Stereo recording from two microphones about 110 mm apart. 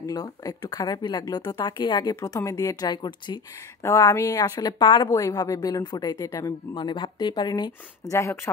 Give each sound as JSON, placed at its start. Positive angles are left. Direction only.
{"t": 0.0, "sound": "speech", "side_deg": 35}
{"t": 3.8, "sound": "speech", "side_deg": 25}
{"t": 5.1, "sound": "speech", "side_deg": 30}
{"t": 6.1, "sound": "speech", "side_deg": 25}
{"t": 6.7, "sound": "speech", "side_deg": 45}
{"t": 8.1, "sound": "speech", "side_deg": 30}